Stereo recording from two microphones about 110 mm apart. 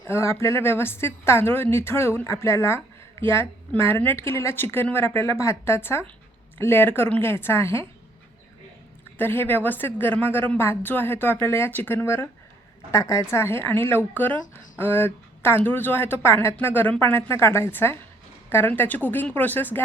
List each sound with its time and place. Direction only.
0.1 s a woman's voice: 25° left (ahead or behind)
9.1 s a woman's voice: 20° left (ahead or behind)